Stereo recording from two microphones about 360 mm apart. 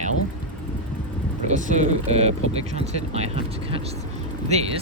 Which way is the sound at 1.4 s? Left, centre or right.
Centre.